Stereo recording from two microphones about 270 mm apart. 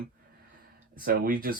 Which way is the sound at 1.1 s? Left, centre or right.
Right.